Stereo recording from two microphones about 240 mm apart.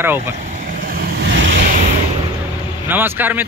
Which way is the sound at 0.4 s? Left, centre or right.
Right.